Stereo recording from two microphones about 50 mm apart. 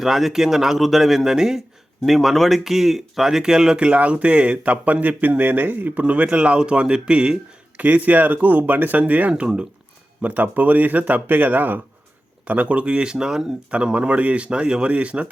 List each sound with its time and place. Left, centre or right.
0.0 s speech: centre
2.0 s speech: centre; by 9.3 s right
9.3 s speech: centre
10.2 s speech: right; by 13.7 s centre
13.7 s speech: right